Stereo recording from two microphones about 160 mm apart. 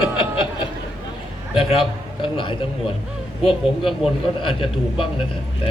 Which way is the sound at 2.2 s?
30° left (ahead or behind).